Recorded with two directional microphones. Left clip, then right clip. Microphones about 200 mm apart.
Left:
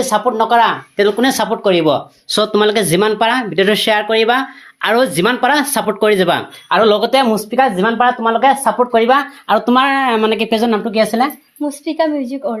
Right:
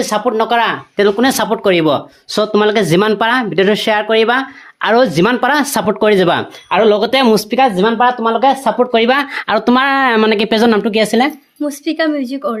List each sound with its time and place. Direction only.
0.0 s speech: 25° right (ahead or behind)
2.3 s speech: 10° right (ahead or behind)
2.9 s speech: 30° right (ahead or behind)
3.7 s speech: 15° right (ahead or behind)
4.8 s speech: 35° right (ahead or behind)
6.7 s speech: 15° right (ahead or behind)
7.0 s speech: 30° right (ahead or behind)
10.7 s speech: 45° right (ahead or behind)